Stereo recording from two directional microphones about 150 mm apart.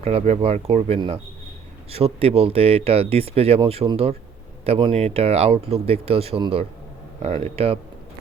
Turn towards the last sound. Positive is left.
turn(degrees=-40)  # may be behind; listen again after turning